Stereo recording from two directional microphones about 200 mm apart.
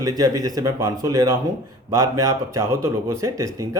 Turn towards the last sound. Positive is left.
turn(degrees=-15)  # may be behind; listen again after turning